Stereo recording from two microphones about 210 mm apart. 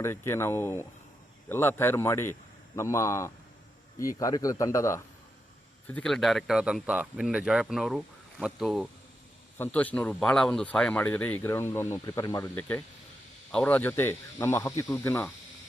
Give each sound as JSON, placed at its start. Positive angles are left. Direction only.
{"t": 0.0, "sound": "speech", "side_deg": 10}
{"t": 5.9, "sound": "speech", "side_deg": 0}